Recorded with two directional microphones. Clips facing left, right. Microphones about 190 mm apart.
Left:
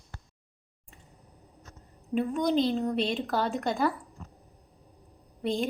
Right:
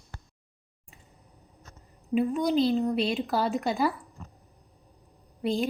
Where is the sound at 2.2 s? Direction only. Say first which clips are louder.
Right 1 dB; 5° right (ahead or behind).